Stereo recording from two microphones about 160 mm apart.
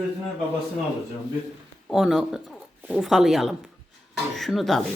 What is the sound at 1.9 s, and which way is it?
A woman's voice, centre (ahead or behind).